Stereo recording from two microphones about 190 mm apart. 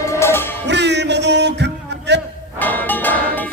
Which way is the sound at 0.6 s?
65° right (ahead or behind).